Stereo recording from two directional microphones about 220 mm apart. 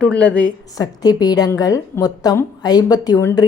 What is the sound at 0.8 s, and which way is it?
A woman's voice, 15° left (ahead or behind).